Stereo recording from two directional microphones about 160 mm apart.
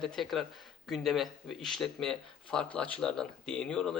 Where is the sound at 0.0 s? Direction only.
Centre (ahead or behind).